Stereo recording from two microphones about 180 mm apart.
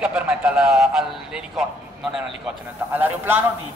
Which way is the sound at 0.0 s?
5° right (ahead or behind).